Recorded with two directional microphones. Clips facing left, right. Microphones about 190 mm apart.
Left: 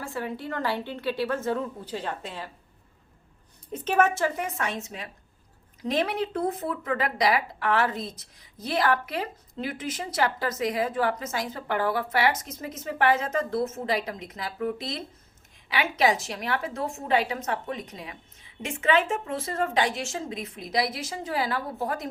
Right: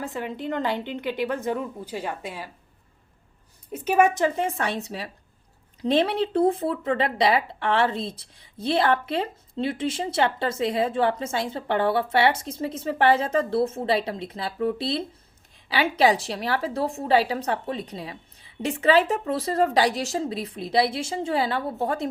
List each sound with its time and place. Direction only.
0.0 s a woman's voice: 20° right (ahead or behind)
3.7 s a woman's voice: 10° right (ahead or behind)
4.4 s a woman's voice: 30° right (ahead or behind)